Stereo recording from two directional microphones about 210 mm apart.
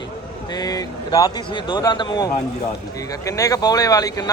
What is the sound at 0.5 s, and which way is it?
A man's voice, 20° left (ahead or behind).